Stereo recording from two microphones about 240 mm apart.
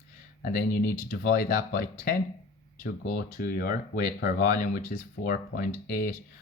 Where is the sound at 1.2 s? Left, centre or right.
Left.